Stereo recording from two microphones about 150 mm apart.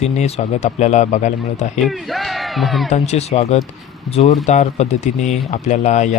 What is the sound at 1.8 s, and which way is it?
Speech, centre (ahead or behind).